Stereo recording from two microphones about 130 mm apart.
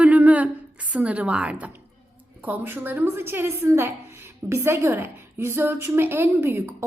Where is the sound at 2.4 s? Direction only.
15° right (ahead or behind).